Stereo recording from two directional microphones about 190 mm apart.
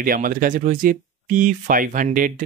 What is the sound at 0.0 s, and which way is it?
Speech, 45° right (ahead or behind).